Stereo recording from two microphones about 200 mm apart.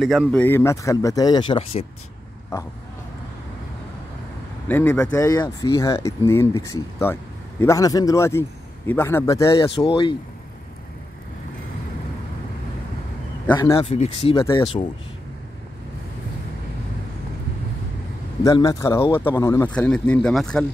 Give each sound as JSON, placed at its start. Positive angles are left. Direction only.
{"t": 0.0, "sound": "speech", "side_deg": 0}
{"t": 4.6, "sound": "speech", "side_deg": 10}
{"t": 9.8, "sound": "speech", "side_deg": 25}
{"t": 13.6, "sound": "speech", "side_deg": 25}
{"t": 18.4, "sound": "speech", "side_deg": 15}